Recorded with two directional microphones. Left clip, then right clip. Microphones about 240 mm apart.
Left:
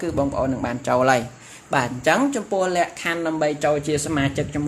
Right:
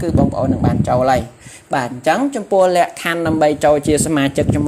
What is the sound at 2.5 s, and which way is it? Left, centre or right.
Speech, right.